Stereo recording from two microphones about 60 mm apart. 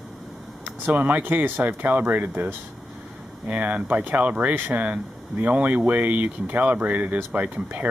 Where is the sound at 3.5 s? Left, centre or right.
Right.